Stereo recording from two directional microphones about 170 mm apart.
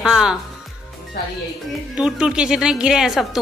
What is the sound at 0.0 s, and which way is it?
Speech, 5° right (ahead or behind).